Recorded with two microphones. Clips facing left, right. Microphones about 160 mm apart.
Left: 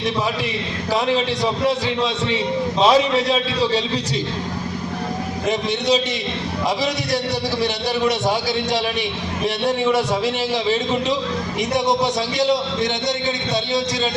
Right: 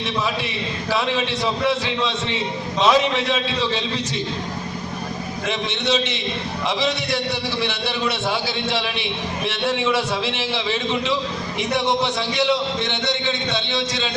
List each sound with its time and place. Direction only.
2.8 s speech: 35° left (ahead or behind)
5.5 s speech: 40° left (ahead or behind)
7.6 s speech: 40° left (ahead or behind)
12.4 s speech: 40° left (ahead or behind)